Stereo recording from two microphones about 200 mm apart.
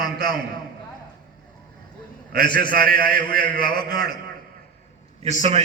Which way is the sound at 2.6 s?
50° right (ahead or behind).